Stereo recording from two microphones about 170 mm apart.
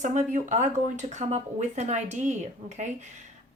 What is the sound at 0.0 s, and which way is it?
A woman's voice, 45° right (ahead or behind).